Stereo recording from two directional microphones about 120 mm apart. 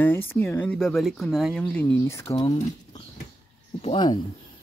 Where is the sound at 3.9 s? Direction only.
40° left (ahead or behind).